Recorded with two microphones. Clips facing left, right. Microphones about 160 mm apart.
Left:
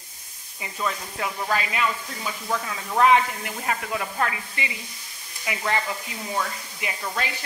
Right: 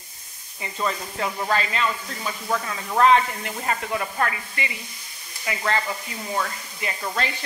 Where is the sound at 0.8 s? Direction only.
Centre (ahead or behind).